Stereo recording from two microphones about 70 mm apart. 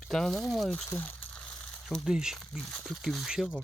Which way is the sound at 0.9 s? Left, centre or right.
Left.